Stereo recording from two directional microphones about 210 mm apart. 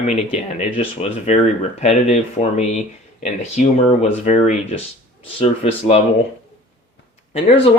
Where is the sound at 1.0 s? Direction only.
30° left (ahead or behind).